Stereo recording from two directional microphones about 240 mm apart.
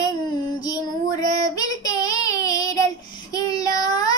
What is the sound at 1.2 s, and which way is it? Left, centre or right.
Child singing, centre.